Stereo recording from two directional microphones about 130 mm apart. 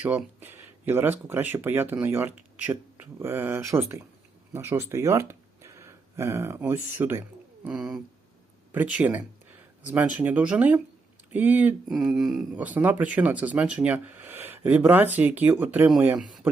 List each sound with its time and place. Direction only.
0.3 s speech: 15° right (ahead or behind)
7.7 s a sound: 5° right (ahead or behind)
8.7 s speech: 10° right (ahead or behind)
11.9 s a sound: 5° right (ahead or behind)
12.5 s speech: 15° right (ahead or behind)
16.1 s speech: centre (ahead or behind)